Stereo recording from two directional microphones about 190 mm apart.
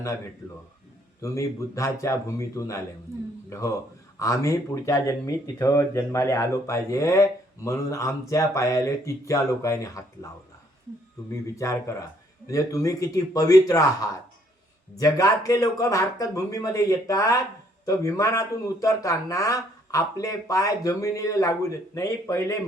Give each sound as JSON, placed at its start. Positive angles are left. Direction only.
{"t": 1.2, "sound": "speech", "side_deg": 15}
{"t": 4.2, "sound": "speech", "side_deg": 15}
{"t": 11.3, "sound": "speech", "side_deg": 15}